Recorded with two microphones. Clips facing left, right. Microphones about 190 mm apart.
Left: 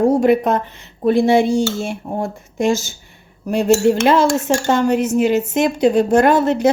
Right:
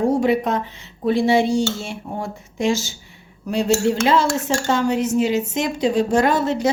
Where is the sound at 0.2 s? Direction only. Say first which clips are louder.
Left 4 dB; 55° left (ahead or behind).